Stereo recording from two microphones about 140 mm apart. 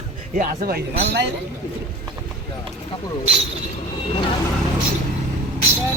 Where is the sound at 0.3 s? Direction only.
90° right.